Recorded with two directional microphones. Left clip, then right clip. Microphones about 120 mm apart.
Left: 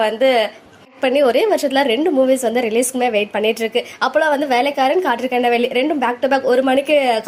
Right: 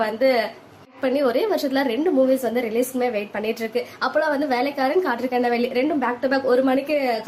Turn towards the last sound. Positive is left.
turn(degrees=35)  # may be behind; listen again after turning